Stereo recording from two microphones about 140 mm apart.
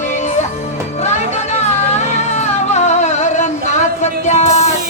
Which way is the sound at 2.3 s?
55° left (ahead or behind).